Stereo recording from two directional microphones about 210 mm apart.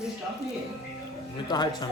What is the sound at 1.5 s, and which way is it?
Speech, 20° left (ahead or behind).